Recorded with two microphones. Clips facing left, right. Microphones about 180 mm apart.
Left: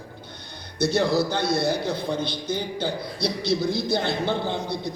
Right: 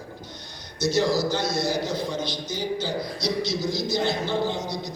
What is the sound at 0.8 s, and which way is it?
A man's voice, 60° left (ahead or behind).